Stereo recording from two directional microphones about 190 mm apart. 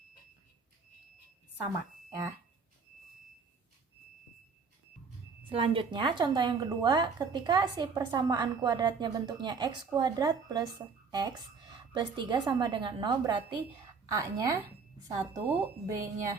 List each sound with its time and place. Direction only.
2.0 s speech: 20° right (ahead or behind)
5.5 s a woman's voice: 30° right (ahead or behind)